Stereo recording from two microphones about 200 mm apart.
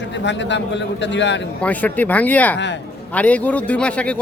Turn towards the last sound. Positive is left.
turn(degrees=5)  # may be behind; listen again after turning